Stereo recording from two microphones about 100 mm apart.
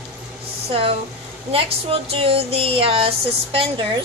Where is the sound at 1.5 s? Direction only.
70° right (ahead or behind).